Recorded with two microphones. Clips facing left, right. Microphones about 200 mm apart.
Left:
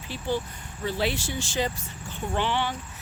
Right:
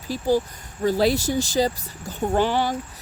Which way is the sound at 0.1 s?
40° right (ahead or behind).